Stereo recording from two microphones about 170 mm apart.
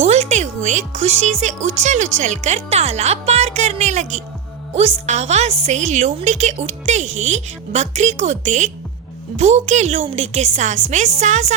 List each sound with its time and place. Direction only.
0.0 s a woman's voice: 40° right (ahead or behind)